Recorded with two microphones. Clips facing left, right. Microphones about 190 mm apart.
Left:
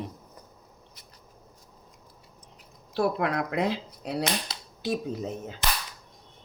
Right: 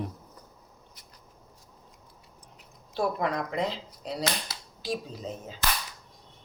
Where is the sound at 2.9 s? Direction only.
70° left (ahead or behind).